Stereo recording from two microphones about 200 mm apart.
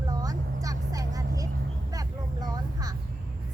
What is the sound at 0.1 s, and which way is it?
Vehicle, 20° right (ahead or behind).